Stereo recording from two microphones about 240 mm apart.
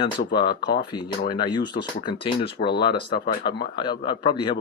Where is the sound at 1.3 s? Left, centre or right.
Centre.